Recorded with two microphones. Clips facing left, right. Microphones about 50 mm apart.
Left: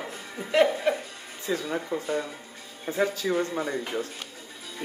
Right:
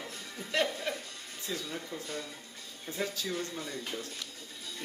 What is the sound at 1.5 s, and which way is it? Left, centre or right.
Speech, left.